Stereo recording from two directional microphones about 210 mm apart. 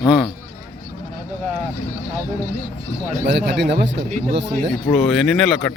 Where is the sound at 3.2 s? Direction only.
55° right (ahead or behind).